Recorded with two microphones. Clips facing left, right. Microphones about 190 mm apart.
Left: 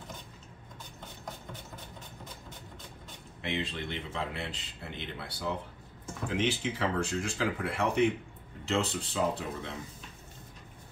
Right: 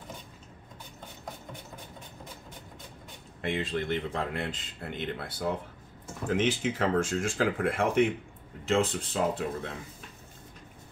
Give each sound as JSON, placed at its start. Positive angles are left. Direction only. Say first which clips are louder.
{"t": 3.4, "sound": "speech", "louder": "right 5 dB", "side_deg": -50}